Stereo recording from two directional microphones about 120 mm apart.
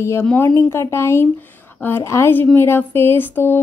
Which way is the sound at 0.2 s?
15° left (ahead or behind).